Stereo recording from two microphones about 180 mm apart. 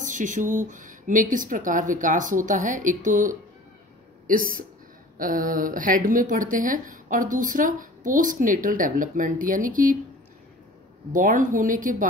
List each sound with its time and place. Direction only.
0.0 s speech: 45° right (ahead or behind)
11.1 s speech: 45° right (ahead or behind)